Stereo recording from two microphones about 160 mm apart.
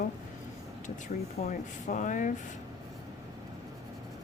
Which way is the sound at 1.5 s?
55° left (ahead or behind).